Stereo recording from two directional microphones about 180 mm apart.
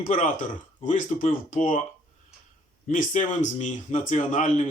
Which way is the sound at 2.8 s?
45° left (ahead or behind).